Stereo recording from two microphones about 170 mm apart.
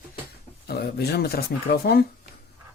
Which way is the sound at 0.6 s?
70° left (ahead or behind).